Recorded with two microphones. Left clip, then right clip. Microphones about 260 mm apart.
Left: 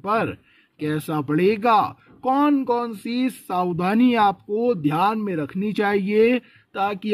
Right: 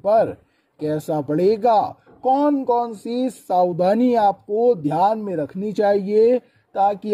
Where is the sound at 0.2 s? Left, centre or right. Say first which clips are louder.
Right 6 dB; centre.